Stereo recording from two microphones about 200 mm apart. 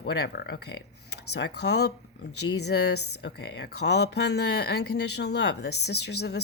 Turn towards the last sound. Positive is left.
turn(degrees=55)  # may be behind; listen again after turning